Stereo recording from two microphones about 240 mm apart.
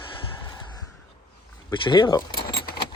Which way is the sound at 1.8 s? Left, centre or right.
Centre.